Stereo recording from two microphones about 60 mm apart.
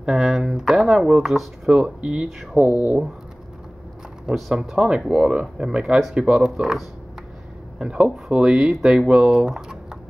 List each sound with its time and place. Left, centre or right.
0.0 s speech: centre; by 3.0 s right
4.3 s speech: centre
7.8 s speech: centre